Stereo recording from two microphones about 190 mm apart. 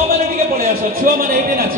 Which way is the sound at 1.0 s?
40° right (ahead or behind).